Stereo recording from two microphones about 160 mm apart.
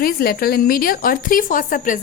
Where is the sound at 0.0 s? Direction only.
65° left (ahead or behind).